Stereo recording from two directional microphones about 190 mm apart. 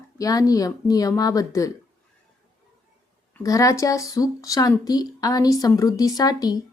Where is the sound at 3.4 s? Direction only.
15° left (ahead or behind).